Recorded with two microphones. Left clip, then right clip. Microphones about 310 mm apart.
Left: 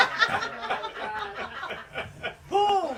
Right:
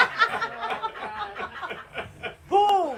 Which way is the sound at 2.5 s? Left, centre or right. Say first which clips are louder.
Right 3 dB; right.